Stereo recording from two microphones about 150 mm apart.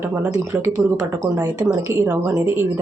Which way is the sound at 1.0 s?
20° right (ahead or behind).